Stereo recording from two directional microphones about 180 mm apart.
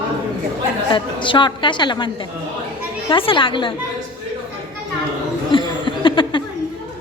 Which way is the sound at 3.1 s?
25° left (ahead or behind).